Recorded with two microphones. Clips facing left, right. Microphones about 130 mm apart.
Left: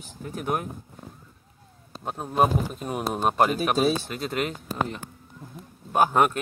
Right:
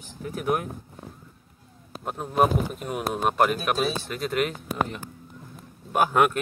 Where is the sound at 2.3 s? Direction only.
5° right (ahead or behind).